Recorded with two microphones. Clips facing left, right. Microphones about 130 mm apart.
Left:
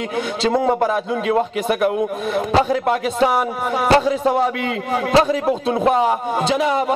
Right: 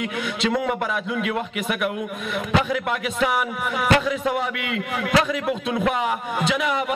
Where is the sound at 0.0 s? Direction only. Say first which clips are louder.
Left 4 dB; 35° left (ahead or behind).